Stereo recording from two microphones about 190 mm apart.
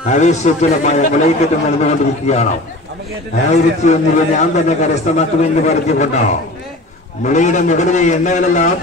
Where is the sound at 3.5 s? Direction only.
40° left (ahead or behind).